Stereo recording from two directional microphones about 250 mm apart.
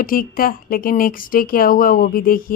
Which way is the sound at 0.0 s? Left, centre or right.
Left.